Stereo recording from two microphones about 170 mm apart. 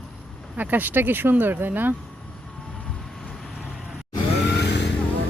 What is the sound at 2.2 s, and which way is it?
Vehicle, 5° left (ahead or behind).